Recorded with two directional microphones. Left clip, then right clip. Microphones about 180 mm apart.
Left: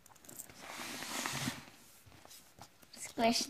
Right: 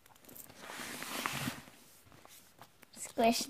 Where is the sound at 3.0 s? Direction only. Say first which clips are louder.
Right 2 dB; 45° right (ahead or behind).